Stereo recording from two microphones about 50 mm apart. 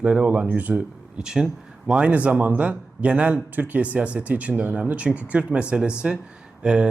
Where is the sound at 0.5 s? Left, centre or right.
Right.